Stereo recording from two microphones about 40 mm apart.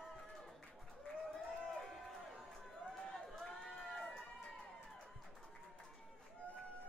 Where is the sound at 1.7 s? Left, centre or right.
Centre.